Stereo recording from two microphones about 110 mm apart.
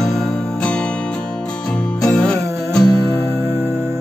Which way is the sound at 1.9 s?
5° left (ahead or behind).